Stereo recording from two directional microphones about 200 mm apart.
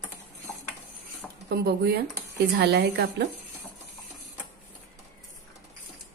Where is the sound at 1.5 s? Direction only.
55° right (ahead or behind).